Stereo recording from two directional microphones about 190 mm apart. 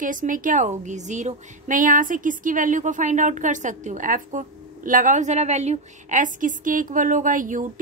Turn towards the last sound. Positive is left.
turn(degrees=-45)  # may be behind; listen again after turning